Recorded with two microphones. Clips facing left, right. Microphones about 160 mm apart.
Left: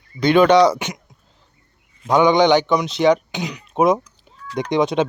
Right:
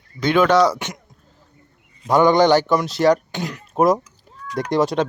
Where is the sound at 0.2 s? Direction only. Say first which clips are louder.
Left 3 dB; 5° right (ahead or behind).